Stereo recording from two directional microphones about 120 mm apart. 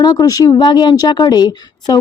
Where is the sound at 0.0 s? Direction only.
35° left (ahead or behind).